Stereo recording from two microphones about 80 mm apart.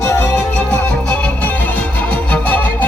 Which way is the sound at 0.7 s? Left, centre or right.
Centre.